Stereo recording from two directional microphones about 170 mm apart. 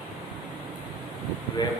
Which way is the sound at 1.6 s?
25° left (ahead or behind).